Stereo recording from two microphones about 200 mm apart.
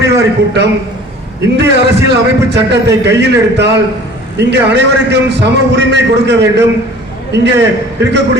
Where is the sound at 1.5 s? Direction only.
60° right (ahead or behind).